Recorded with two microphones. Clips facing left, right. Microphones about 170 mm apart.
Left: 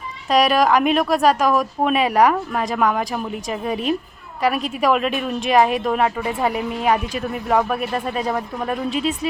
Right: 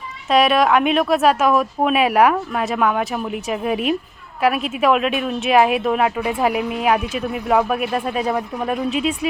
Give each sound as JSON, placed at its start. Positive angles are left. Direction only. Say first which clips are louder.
{"t": 0.3, "sound": "speech", "louder": "right 1 dB", "side_deg": 0}